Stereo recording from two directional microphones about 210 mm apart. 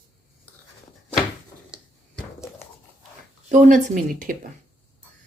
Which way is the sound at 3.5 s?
40° right (ahead or behind).